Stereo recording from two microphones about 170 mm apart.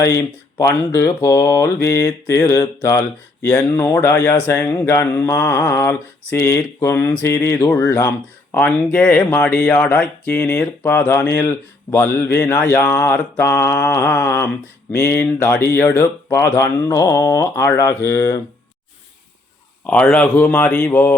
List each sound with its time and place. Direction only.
0.0 s speech: 20° left (ahead or behind)
3.4 s speech: 5° left (ahead or behind)
3.8 s speech: 15° left (ahead or behind)
19.9 s speech: 5° left (ahead or behind)